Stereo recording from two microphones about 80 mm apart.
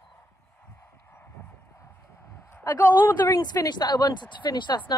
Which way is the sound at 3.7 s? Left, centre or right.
Left.